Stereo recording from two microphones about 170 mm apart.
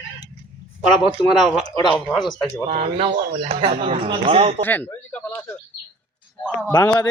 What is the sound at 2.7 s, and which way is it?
Speech, 35° right (ahead or behind).